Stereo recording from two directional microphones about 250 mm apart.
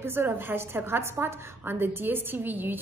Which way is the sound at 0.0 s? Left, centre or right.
Centre.